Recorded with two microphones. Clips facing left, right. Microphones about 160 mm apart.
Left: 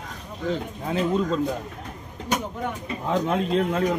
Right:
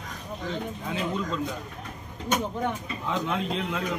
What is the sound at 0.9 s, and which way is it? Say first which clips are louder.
Speech: left 7 dB; 35° left (ahead or behind).